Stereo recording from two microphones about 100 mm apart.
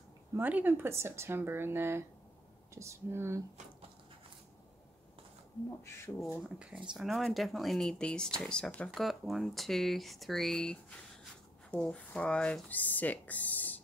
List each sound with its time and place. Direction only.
0.4 s speech: 15° right (ahead or behind)
6.1 s speech: 25° left (ahead or behind)
6.9 s speech: centre (ahead or behind); by 13.7 s 15° left (ahead or behind)